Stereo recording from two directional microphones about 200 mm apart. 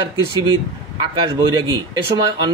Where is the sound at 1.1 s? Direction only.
20° right (ahead or behind).